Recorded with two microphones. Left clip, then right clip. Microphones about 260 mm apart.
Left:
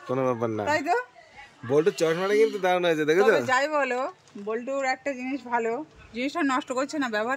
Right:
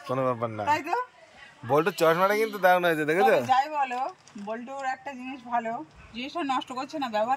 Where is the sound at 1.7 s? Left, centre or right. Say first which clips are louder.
Even; centre.